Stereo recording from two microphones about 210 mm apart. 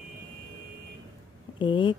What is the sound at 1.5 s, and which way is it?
Speech, 25° left (ahead or behind).